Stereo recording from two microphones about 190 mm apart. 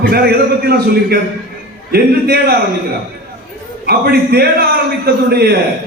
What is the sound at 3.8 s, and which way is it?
A man's voice, 55° right (ahead or behind).